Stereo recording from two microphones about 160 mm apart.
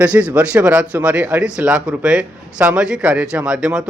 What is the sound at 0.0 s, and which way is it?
Speech, 10° right (ahead or behind).